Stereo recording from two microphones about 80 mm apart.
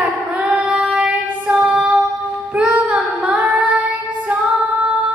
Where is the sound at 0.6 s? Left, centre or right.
Centre.